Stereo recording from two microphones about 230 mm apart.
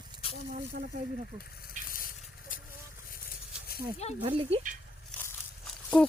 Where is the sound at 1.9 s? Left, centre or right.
Left.